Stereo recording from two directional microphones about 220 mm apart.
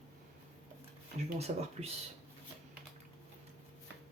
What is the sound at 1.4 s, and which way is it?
Speech, 30° right (ahead or behind).